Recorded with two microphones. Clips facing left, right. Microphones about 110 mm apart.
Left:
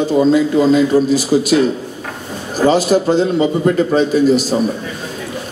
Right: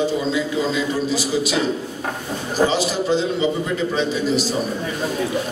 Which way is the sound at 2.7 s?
50° left (ahead or behind).